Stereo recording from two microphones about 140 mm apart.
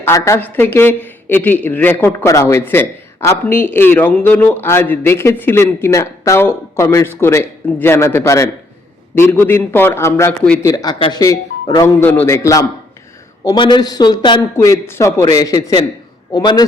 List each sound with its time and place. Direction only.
0.0 s a man's voice: 20° left (ahead or behind)
11.8 s a man's voice: 15° left (ahead or behind)
13.4 s a man's voice: 30° left (ahead or behind)
14.5 s a man's voice: 20° left (ahead or behind)